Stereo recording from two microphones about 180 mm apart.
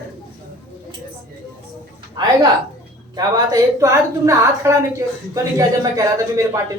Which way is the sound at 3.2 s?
20° right (ahead or behind).